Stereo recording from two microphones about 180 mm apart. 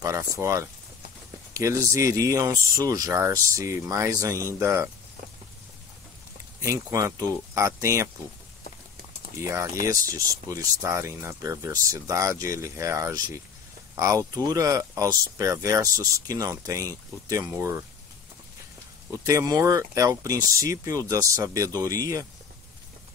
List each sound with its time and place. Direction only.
0.0 s speech: 15° right (ahead or behind)
6.6 s speech: 15° right (ahead or behind)
9.4 s speech: 15° right (ahead or behind)
19.2 s speech: 20° right (ahead or behind)